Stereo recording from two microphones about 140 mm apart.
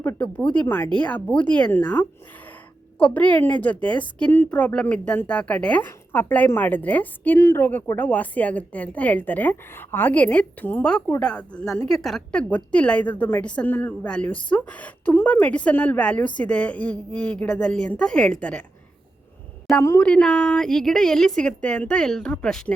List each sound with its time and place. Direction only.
0.0 s a woman's voice: 15° left (ahead or behind)
20.0 s a woman's voice: 10° left (ahead or behind)